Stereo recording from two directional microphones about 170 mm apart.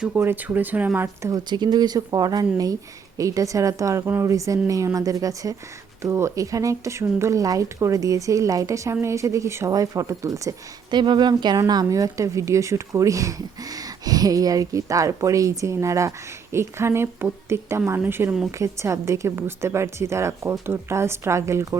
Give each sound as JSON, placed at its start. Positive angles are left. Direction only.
{"t": 0.0, "sound": "a woman's voice", "side_deg": -10}